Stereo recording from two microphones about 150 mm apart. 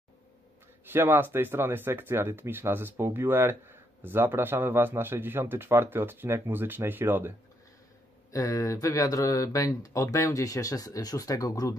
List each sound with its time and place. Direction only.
0.8 s speech: 15° right (ahead or behind)
8.3 s speech: 20° left (ahead or behind)